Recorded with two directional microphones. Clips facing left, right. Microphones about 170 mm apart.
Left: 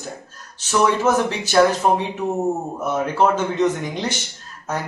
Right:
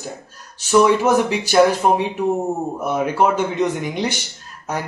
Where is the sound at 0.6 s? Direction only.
10° right (ahead or behind).